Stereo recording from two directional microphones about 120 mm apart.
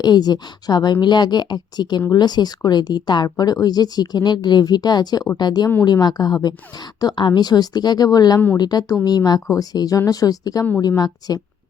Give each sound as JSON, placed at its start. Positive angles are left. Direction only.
{"t": 0.0, "sound": "speech", "side_deg": 35}